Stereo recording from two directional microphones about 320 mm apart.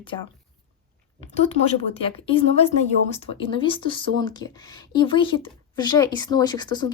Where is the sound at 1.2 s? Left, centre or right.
Centre.